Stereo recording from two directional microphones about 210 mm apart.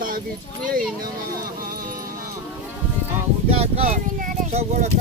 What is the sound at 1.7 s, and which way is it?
Music, 40° right (ahead or behind).